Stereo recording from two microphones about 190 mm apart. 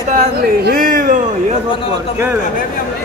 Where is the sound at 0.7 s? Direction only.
50° right (ahead or behind).